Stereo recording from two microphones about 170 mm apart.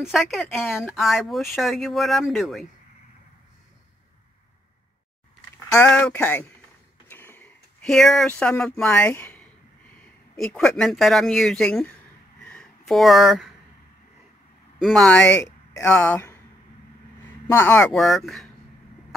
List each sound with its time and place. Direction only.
0.0 s speech: centre (ahead or behind)
5.7 s speech: 5° left (ahead or behind)
7.1 s a sound: 15° left (ahead or behind)
8.3 s speech: 5° left (ahead or behind)
12.4 s a sound: 5° left (ahead or behind)
14.8 s speech: centre (ahead or behind)
15.4 s a sound: 20° left (ahead or behind)
15.9 s speech: 10° left (ahead or behind)
17.5 s speech: 10° left (ahead or behind)
17.9 s speech: centre (ahead or behind)